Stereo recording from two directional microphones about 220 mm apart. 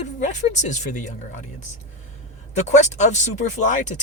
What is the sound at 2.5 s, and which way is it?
Speech, 30° left (ahead or behind).